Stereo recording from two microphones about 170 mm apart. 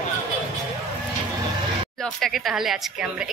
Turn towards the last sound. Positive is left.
turn(degrees=-5)  # may be behind; listen again after turning